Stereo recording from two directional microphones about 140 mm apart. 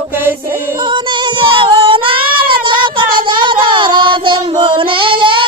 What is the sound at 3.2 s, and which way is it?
Child singing, 35° right (ahead or behind).